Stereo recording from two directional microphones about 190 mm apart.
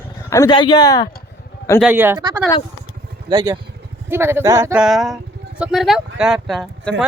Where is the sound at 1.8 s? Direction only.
10° right (ahead or behind).